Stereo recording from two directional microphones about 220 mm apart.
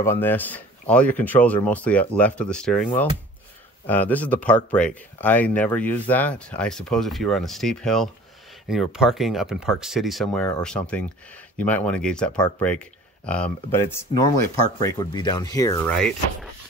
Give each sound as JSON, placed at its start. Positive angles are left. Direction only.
{"t": 0.0, "sound": "speech", "side_deg": 10}